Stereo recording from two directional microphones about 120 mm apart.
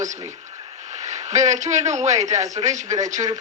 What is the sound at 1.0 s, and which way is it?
A man's voice, 80° right.